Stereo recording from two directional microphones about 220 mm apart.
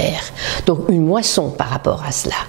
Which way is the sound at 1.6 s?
20° right (ahead or behind).